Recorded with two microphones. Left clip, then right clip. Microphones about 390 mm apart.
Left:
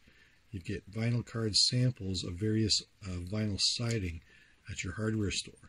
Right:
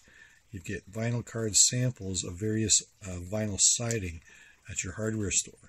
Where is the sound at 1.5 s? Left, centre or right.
Right.